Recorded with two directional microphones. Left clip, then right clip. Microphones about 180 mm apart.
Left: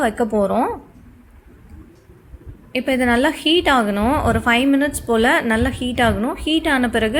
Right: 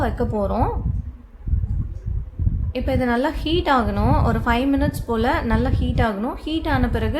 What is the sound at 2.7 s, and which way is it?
A woman's voice, 15° left (ahead or behind).